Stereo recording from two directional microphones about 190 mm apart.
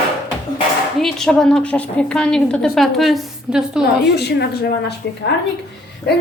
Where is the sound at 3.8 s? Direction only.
60° left (ahead or behind).